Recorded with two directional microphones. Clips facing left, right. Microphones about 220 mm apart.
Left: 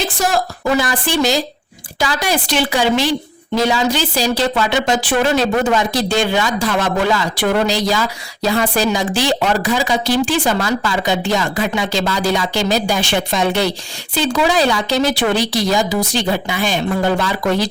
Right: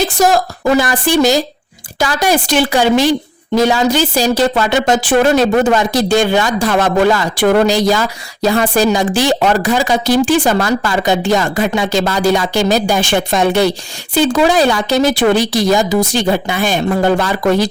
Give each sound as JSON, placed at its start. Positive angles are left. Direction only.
{"t": 0.8, "sound": "speech", "side_deg": -45}